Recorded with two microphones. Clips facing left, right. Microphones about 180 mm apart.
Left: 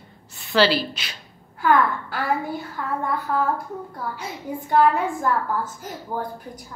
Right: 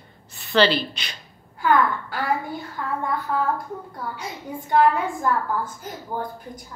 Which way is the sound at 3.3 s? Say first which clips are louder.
Left 2 dB; centre (ahead or behind).